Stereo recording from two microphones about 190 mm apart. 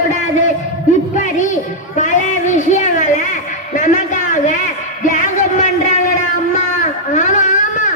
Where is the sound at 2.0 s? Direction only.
40° left (ahead or behind).